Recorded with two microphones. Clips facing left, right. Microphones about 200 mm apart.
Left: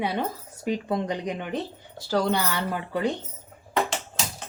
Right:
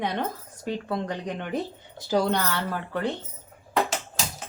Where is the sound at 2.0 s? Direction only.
15° right (ahead or behind).